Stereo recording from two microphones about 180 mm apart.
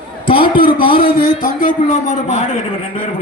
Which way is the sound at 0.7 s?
25° left (ahead or behind).